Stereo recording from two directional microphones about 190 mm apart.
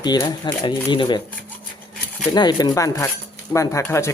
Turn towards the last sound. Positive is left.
turn(degrees=15)  # may be behind; listen again after turning